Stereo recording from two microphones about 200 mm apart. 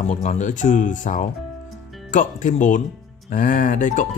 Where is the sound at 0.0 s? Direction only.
35° left (ahead or behind).